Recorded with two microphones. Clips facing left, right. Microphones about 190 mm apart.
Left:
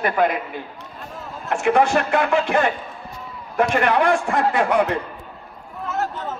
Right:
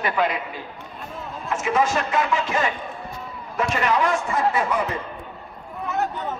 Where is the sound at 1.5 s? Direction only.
65° left (ahead or behind).